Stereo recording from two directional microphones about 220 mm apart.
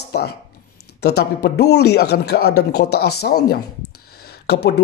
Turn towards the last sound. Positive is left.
turn(degrees=45)  # may be behind; listen again after turning